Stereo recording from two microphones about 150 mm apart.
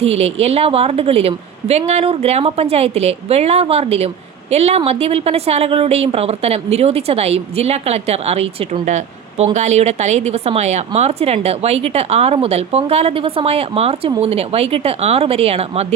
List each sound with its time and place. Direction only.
0.0 s a woman's voice: 45° right (ahead or behind)